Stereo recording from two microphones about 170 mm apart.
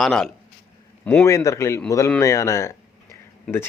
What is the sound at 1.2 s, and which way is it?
Speech, 20° left (ahead or behind).